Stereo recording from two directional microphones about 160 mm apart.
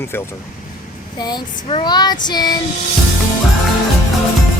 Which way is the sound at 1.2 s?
25° left (ahead or behind).